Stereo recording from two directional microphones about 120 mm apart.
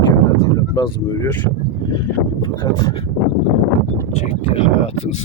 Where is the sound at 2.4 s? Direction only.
40° left (ahead or behind).